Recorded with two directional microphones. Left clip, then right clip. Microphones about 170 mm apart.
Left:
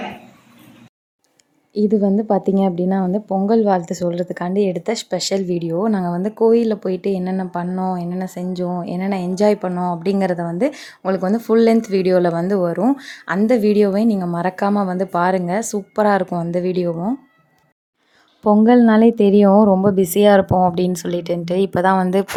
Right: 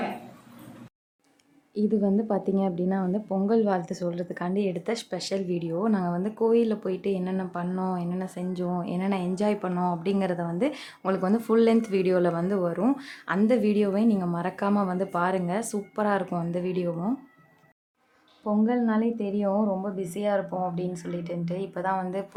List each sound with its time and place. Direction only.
1.7 s speech: 40° left (ahead or behind)
7.7 s speech: 25° left (ahead or behind)
10.0 s speech: 40° left (ahead or behind)
16.9 s speech: 30° left (ahead or behind)
18.4 s a woman's voice: 50° left (ahead or behind)